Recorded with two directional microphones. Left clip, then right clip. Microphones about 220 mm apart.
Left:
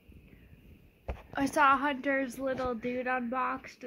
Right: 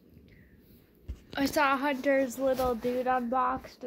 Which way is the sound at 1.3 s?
20° left (ahead or behind).